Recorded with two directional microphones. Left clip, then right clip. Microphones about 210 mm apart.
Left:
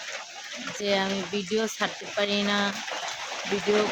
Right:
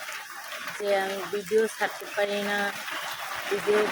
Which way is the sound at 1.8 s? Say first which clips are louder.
Even; 20° left (ahead or behind).